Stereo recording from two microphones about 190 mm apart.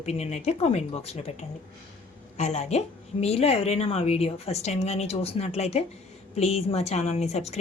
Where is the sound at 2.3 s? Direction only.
35° left (ahead or behind).